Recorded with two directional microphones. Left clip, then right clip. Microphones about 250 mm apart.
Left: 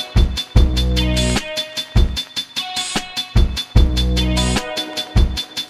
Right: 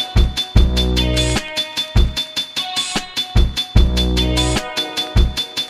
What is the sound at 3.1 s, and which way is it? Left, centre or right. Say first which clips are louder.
Music: right 2 dB; right.